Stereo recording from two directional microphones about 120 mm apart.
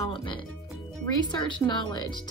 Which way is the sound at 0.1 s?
45° left (ahead or behind).